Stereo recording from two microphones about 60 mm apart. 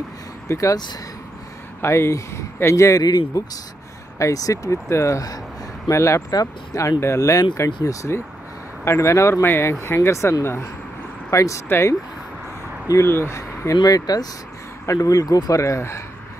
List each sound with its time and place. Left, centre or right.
0.5 s speech: left
1.8 s speech: left
4.8 s speech: left
5.9 s speech: left
6.3 s speech: left
8.8 s speech: left
9.4 s speech: left
11.2 s speech: left
13.0 s speech: left
13.7 s speech: left
14.9 s speech: left